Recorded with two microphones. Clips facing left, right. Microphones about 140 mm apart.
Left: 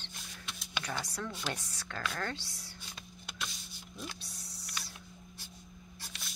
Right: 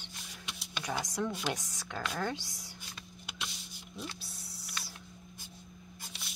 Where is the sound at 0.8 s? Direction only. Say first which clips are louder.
Right 6 dB; 15° right (ahead or behind).